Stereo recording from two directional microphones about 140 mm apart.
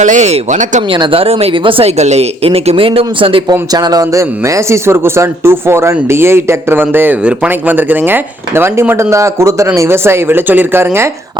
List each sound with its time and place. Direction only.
0.0 s speech: 60° right (ahead or behind)
0.9 s speech: 35° right (ahead or behind)
3.5 s speech: 25° right (ahead or behind)